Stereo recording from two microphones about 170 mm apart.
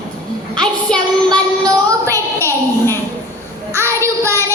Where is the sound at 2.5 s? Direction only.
15° left (ahead or behind).